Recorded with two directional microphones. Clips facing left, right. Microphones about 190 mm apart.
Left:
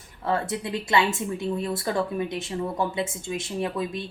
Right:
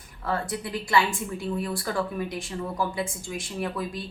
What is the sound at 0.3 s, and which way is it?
Speech, 25° left (ahead or behind).